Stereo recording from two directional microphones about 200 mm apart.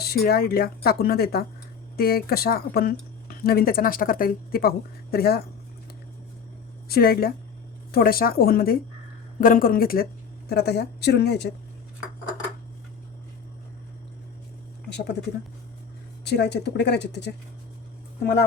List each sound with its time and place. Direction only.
0.0 s speech: 50° left (ahead or behind)
6.8 s speech: 50° left (ahead or behind)
14.8 s a sound: 60° left (ahead or behind)
16.2 s speech: 55° left (ahead or behind)